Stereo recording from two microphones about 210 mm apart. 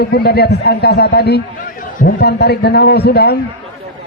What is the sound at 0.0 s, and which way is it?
A man's voice, 50° left (ahead or behind).